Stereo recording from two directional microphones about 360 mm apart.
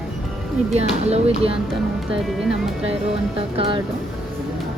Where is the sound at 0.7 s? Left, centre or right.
Centre.